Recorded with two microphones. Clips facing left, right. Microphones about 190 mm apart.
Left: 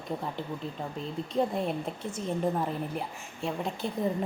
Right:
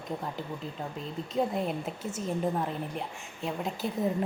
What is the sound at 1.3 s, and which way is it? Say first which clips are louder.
A woman's voice: left 1 dB; centre (ahead or behind).